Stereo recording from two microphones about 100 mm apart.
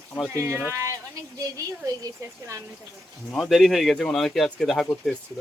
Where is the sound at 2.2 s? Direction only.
35° right (ahead or behind).